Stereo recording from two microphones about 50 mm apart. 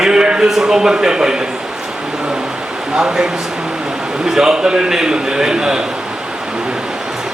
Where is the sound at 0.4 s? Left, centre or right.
Centre.